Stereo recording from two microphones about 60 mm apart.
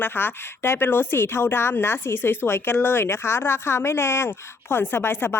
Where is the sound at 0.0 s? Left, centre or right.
Left.